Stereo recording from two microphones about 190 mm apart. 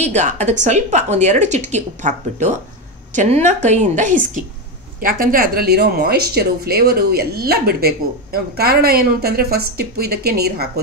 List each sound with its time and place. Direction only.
0.0 s a woman's voice: 40° right (ahead or behind); by 10.7 s 55° right (ahead or behind)